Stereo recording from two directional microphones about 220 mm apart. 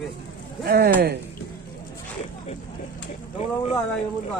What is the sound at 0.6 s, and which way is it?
Speech, 45° right (ahead or behind).